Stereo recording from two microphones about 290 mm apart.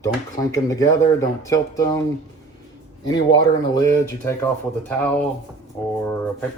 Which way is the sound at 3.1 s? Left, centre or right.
Centre.